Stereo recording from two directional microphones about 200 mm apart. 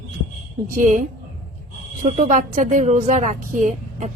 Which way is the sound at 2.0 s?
40° right (ahead or behind).